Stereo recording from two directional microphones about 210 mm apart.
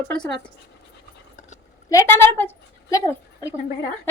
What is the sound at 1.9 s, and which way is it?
A woman's voice, 15° left (ahead or behind).